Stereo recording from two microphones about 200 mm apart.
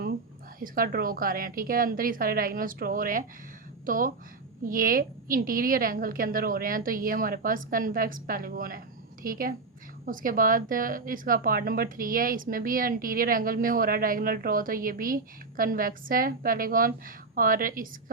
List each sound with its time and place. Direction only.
0.6 s speech: 45° right (ahead or behind)